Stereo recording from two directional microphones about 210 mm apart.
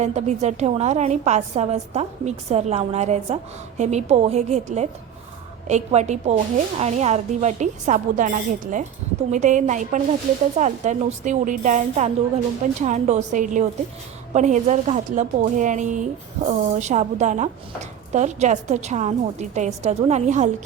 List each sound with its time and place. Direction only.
0.0 s a woman's voice: 30° right (ahead or behind)